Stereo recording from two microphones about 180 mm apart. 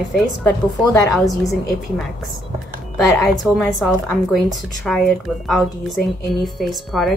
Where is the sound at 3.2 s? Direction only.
Centre (ahead or behind).